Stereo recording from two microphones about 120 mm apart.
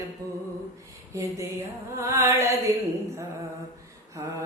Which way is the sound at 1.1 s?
25° right (ahead or behind).